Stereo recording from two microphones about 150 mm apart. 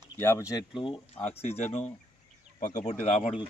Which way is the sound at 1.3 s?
45° left (ahead or behind).